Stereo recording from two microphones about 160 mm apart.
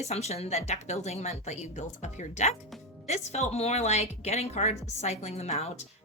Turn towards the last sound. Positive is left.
turn(degrees=45)  # may be behind; listen again after turning